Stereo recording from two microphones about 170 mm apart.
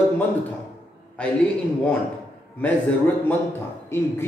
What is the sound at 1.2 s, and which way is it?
Speech, 5° left (ahead or behind).